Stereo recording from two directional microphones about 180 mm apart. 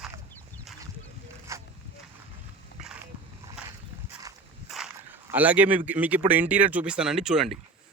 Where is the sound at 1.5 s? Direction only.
15° right (ahead or behind).